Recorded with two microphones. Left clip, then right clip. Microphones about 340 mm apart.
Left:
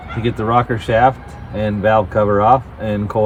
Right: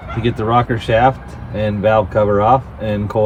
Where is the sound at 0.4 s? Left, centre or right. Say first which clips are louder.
Even; centre.